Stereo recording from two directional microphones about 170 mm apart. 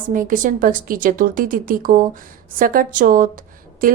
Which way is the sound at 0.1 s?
50° right (ahead or behind).